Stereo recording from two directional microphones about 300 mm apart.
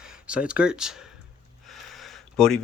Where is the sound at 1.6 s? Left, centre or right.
Centre.